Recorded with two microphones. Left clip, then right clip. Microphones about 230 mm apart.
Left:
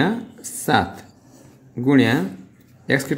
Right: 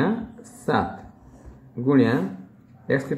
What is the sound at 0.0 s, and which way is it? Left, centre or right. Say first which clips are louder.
Speech: left 3 dB; left.